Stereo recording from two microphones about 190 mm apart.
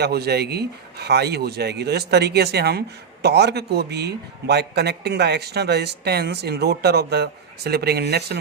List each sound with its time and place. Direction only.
0.0 s speech: 60° right (ahead or behind)